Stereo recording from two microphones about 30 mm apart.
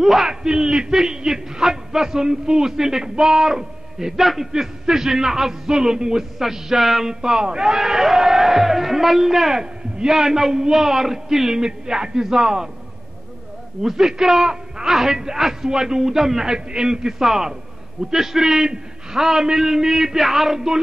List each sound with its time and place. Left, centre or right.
0.0 s a man's voice: centre
0.3 s a sound: centre
0.9 s a man's voice: centre
4.2 s a man's voice: centre
4.5 s a man's voice: centre
6.3 s a man's voice: centre
7.1 s speech: right
7.7 s a man's voice: centre
13.8 s a man's voice: centre
17.2 s a man's voice: centre
20.5 s speech: centre